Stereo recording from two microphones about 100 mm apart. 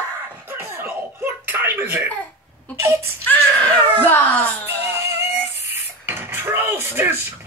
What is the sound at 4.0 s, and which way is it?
Baby cry, 20° left (ahead or behind).